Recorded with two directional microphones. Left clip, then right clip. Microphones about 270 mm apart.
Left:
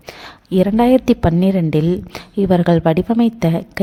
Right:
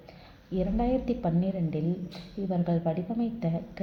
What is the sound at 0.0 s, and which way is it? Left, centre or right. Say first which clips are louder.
A woman's voice: left 17 dB; left.